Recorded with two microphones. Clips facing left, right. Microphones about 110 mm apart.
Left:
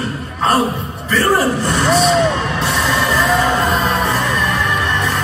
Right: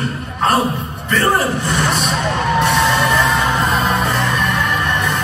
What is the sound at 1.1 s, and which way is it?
Speech, centre (ahead or behind).